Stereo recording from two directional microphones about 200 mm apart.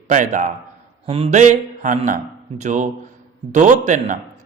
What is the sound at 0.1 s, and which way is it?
A man's voice, 40° right (ahead or behind).